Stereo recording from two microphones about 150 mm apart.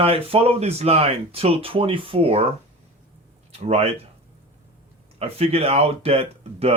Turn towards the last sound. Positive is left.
turn(degrees=-40)  # may be behind; listen again after turning